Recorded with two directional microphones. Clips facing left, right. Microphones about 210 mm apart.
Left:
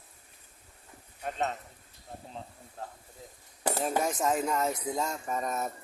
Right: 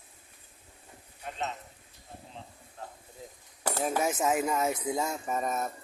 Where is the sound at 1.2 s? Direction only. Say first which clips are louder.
Left 4 dB; 50° left (ahead or behind).